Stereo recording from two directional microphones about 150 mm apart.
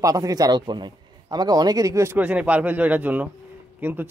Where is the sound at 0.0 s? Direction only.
25° right (ahead or behind).